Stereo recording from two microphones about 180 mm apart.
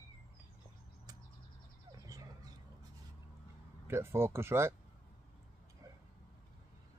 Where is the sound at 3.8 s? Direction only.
15° right (ahead or behind).